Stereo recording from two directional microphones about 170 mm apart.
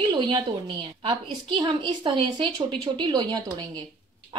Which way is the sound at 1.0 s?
30° right (ahead or behind).